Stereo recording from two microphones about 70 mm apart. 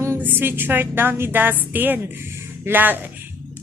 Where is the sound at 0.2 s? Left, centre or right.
Right.